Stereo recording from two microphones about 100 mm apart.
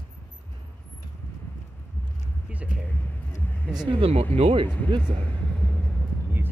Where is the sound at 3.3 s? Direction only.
20° left (ahead or behind).